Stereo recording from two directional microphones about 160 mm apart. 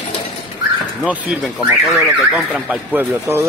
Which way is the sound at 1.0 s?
5° right (ahead or behind).